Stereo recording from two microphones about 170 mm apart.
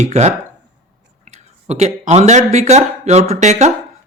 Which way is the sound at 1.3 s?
40° right (ahead or behind).